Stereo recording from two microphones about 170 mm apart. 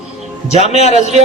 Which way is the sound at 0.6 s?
40° left (ahead or behind).